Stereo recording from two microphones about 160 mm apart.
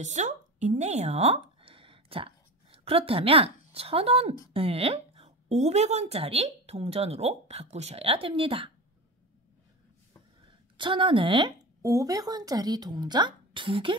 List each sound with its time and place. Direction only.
0.0 s a woman's voice: 50° right (ahead or behind)
10.8 s a woman's voice: 30° right (ahead or behind)
11.8 s speech: 20° right (ahead or behind)